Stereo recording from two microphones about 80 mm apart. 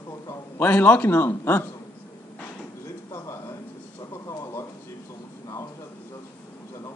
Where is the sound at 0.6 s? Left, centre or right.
Left.